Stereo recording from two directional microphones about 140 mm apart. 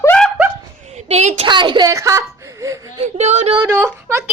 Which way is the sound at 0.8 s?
50° right (ahead or behind).